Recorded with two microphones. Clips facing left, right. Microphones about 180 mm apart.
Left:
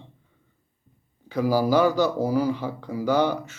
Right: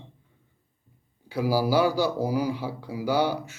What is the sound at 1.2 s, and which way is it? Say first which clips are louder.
Speech: left 3 dB; 10° right (ahead or behind).